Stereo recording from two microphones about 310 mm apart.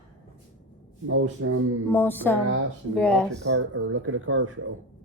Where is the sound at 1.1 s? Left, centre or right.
Right.